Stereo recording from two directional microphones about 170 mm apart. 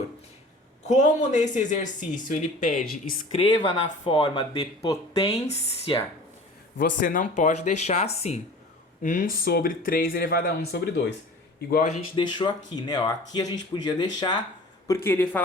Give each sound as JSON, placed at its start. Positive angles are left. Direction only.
{"t": 0.9, "sound": "speech", "side_deg": 45}
{"t": 5.2, "sound": "speech", "side_deg": 35}
{"t": 7.0, "sound": "speech", "side_deg": 55}
{"t": 9.0, "sound": "speech", "side_deg": 50}
{"t": 12.1, "sound": "speech", "side_deg": 25}
{"t": 14.8, "sound": "speech", "side_deg": 15}